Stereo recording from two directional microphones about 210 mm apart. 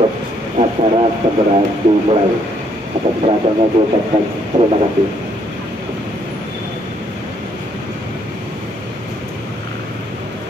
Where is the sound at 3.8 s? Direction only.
30° right (ahead or behind).